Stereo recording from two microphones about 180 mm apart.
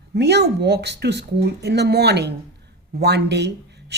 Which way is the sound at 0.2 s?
70° right (ahead or behind).